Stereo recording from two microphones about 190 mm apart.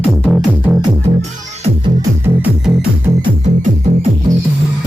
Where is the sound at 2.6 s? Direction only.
5° right (ahead or behind).